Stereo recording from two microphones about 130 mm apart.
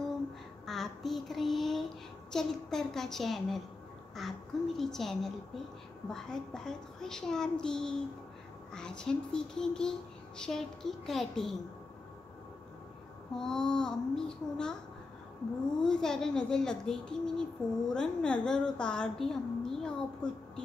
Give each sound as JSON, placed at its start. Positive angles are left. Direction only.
{"t": 0.7, "sound": "a sound", "side_deg": 0}
{"t": 2.3, "sound": "speech", "side_deg": 5}
{"t": 13.3, "sound": "speech", "side_deg": 5}
{"t": 15.8, "sound": "a woman's voice", "side_deg": 5}